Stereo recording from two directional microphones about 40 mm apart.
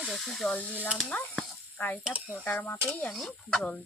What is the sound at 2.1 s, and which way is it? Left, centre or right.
Speech, left.